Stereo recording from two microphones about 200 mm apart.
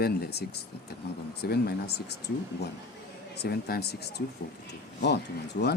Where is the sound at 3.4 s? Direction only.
50° left (ahead or behind).